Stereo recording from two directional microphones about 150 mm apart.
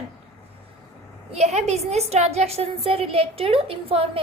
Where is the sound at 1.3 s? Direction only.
45° right (ahead or behind).